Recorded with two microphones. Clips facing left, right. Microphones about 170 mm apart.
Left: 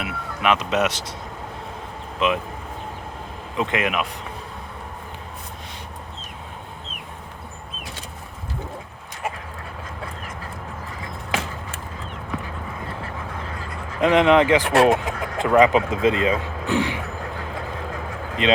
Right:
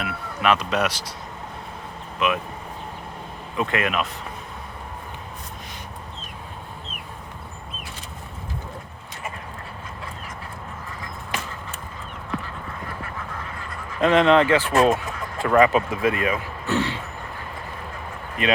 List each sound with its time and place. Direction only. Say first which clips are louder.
0.0 s speech: even; 20° left (ahead or behind)
2.1 s speech: left 2 dB; 25° left (ahead or behind)
3.6 s speech: left 1 dB; 20° left (ahead or behind)
14.0 s speech: left 1 dB; 15° left (ahead or behind)
14.7 s vehicle: left 2 dB; 85° left
15.4 s speech: left 1 dB; 20° left (ahead or behind)
18.4 s speech: left 3 dB; 20° left (ahead or behind)